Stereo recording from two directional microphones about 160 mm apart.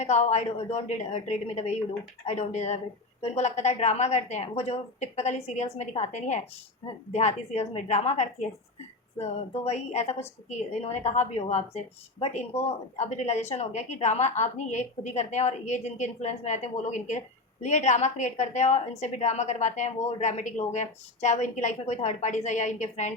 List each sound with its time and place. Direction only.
0.0 s speech: 45° left (ahead or behind)